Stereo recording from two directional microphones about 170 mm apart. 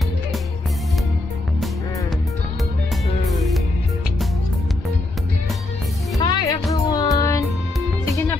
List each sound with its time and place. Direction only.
6.1 s music: 20° left (ahead or behind)